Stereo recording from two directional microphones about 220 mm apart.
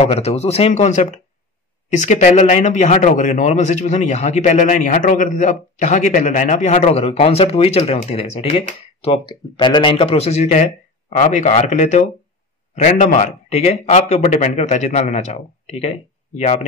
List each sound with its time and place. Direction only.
0.0 s a man's voice: 30° left (ahead or behind)